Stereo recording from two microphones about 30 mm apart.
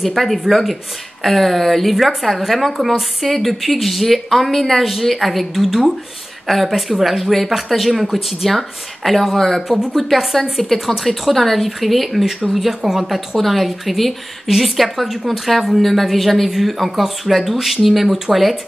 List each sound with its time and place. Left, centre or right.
0.0 s a woman's voice: centre
6.7 s a woman's voice: centre
13.4 s a woman's voice: centre